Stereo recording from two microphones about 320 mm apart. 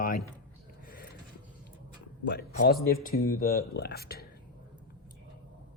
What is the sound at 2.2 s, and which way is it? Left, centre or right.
Speech, left.